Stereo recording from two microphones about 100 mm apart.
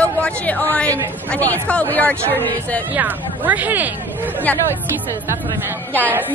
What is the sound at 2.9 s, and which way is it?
Speech, 15° right (ahead or behind).